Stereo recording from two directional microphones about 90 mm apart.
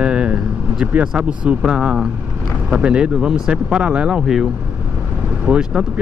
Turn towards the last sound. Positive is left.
turn(degrees=-5)  # may be behind; listen again after turning